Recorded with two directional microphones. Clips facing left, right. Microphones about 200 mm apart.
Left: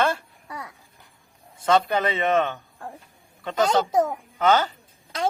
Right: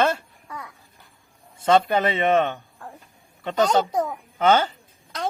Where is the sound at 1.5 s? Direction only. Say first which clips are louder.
Right 2 dB; 25° right (ahead or behind).